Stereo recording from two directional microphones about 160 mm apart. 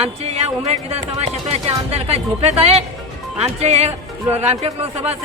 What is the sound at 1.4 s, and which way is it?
Speech, 40° right (ahead or behind).